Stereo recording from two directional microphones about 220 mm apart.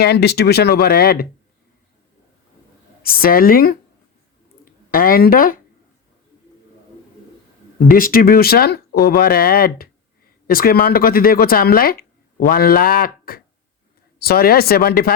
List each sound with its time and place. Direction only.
0.0 s speech: 45° left (ahead or behind)
3.0 s speech: 40° left (ahead or behind)
7.9 s speech: 40° left (ahead or behind)